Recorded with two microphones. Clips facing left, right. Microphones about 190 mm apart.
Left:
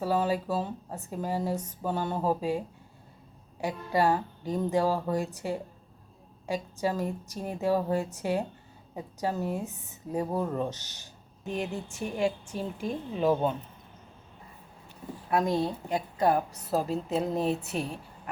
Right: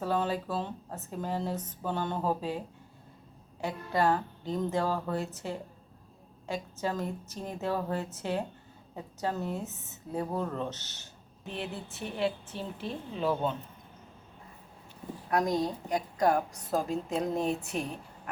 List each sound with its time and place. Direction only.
0.0 s speech: 10° left (ahead or behind)
3.6 s speech: 10° left (ahead or behind)
15.9 s speech: 5° left (ahead or behind)
17.7 s a woman's voice: 30° left (ahead or behind)